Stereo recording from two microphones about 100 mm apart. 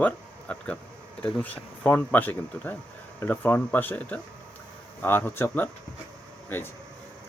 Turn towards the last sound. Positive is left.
turn(degrees=20)  # may be behind; listen again after turning